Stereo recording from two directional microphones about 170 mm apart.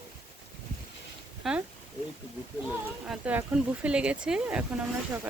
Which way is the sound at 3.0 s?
5° right (ahead or behind).